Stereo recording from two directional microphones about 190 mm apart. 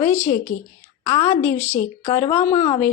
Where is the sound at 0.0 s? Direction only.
10° left (ahead or behind).